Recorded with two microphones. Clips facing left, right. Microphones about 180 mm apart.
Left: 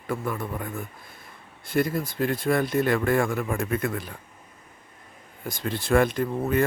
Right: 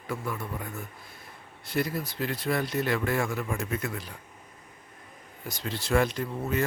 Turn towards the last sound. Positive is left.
turn(degrees=55)  # may be behind; listen again after turning